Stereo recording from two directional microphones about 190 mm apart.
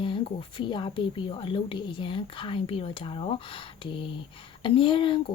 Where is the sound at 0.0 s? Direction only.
25° left (ahead or behind).